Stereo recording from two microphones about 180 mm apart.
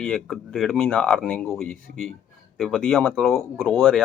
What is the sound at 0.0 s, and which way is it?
Speech, centre (ahead or behind).